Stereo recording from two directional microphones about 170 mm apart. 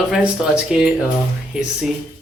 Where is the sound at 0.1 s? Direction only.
5° right (ahead or behind).